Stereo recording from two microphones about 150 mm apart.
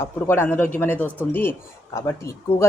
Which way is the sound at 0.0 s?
15° left (ahead or behind).